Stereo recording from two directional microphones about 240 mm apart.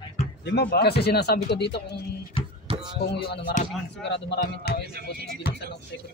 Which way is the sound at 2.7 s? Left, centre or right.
Centre.